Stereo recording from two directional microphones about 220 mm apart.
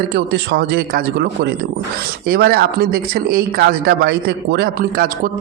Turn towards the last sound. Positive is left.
turn(degrees=-40)  # may be behind; listen again after turning